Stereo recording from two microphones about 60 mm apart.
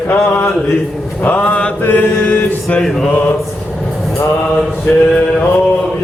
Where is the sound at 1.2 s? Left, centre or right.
Left.